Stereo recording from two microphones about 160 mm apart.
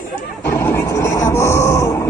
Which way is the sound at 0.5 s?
15° left (ahead or behind).